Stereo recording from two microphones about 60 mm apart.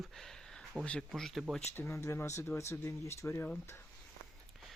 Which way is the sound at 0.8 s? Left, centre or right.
Centre.